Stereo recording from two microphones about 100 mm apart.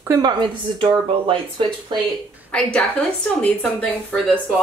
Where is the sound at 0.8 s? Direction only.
65° right (ahead or behind).